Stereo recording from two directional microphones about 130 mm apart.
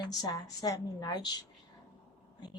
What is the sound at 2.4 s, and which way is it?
Speech, 30° left (ahead or behind).